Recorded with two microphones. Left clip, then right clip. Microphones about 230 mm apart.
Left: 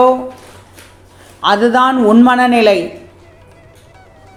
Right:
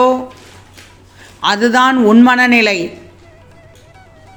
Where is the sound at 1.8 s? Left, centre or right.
Right.